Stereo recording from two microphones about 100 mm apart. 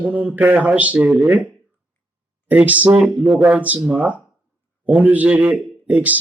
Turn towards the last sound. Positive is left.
turn(degrees=-15)  # may be behind; listen again after turning